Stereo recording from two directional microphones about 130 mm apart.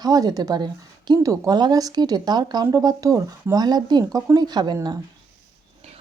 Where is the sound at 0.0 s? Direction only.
30° right (ahead or behind).